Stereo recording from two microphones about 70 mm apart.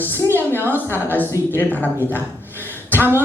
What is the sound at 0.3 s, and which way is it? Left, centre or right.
Speech, right.